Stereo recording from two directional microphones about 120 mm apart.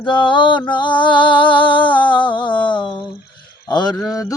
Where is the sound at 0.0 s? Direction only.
40° left (ahead or behind).